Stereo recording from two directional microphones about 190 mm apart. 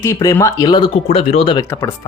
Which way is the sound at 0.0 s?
15° left (ahead or behind).